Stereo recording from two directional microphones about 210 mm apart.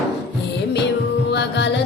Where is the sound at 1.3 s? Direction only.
55° left (ahead or behind).